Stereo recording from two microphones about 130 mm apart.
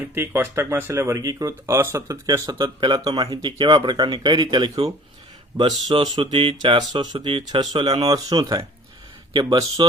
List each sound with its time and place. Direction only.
0.1 s speech: 20° right (ahead or behind); by 9.8 s 35° right (ahead or behind)